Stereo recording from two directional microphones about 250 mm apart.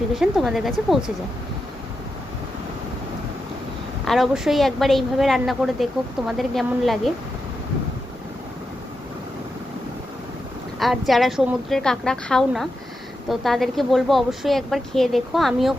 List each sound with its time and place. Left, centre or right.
0.2 s a woman's voice: centre
4.0 s a woman's voice: centre
10.8 s a woman's voice: centre